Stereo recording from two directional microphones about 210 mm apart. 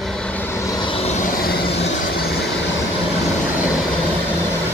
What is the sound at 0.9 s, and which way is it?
Vehicle, 30° left (ahead or behind).